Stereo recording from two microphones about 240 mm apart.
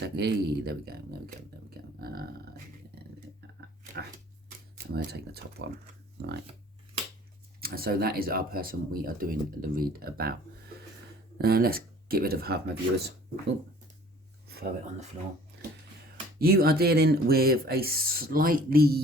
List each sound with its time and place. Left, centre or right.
0.0 s a sound: right
4.9 s speech: right
7.6 s speech: right
11.3 s speech: right
16.4 s speech: right